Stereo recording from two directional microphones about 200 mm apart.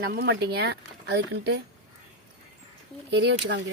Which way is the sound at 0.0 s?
50° right (ahead or behind).